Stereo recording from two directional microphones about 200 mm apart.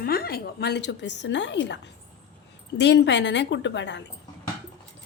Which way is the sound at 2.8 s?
60° left (ahead or behind).